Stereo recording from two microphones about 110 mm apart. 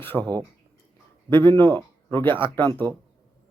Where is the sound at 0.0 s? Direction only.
15° left (ahead or behind).